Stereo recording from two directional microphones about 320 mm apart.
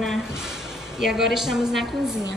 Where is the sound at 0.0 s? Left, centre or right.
Centre.